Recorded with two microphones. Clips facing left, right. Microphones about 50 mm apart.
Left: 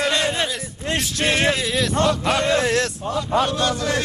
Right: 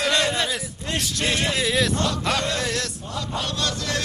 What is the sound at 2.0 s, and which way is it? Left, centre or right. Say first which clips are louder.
Speech: left 5 dB; left.